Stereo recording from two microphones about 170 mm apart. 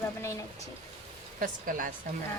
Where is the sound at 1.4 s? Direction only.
55° right (ahead or behind).